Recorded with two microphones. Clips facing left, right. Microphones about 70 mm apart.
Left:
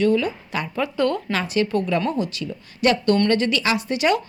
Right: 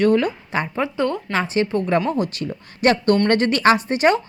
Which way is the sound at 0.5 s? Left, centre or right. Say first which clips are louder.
Right 1 dB; right.